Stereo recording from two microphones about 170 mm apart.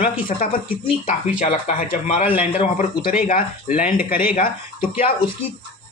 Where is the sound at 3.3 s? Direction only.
55° left (ahead or behind).